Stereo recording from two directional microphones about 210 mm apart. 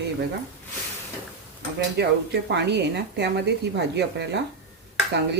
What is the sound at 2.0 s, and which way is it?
Speech, 50° right (ahead or behind).